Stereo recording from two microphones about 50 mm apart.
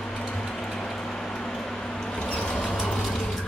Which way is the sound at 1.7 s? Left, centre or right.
Centre.